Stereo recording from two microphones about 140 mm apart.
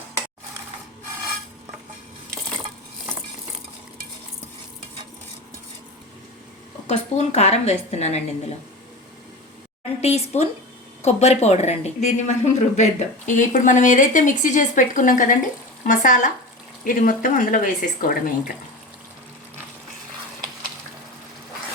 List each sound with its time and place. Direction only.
6.8 s speech: 50° left (ahead or behind)
10.0 s speech: 50° left (ahead or behind); by 18.5 s 75° left (ahead or behind)